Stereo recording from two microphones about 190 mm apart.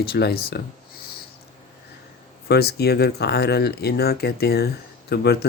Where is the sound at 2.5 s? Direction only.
55° left (ahead or behind).